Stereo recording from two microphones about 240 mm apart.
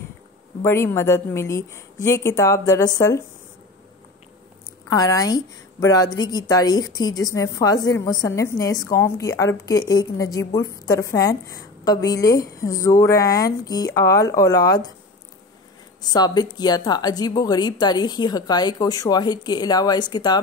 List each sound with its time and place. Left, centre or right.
0.6 s a woman's voice: centre
4.8 s a woman's voice: centre
16.0 s a woman's voice: centre